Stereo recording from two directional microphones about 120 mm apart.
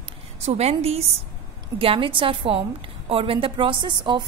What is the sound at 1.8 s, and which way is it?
A woman's voice, 50° right (ahead or behind).